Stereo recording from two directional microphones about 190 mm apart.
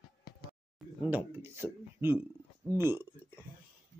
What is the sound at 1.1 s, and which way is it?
Speech, 10° right (ahead or behind).